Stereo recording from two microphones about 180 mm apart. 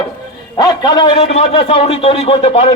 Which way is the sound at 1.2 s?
35° left (ahead or behind).